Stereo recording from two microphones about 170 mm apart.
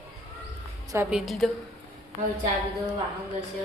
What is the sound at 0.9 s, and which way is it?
Speech, 15° right (ahead or behind).